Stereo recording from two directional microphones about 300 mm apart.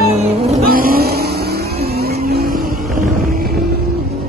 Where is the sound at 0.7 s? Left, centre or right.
Right.